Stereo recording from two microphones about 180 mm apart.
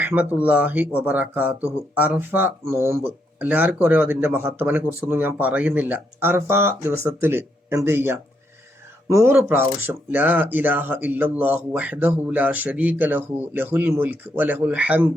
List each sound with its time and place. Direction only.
0.0 s speech: 10° right (ahead or behind)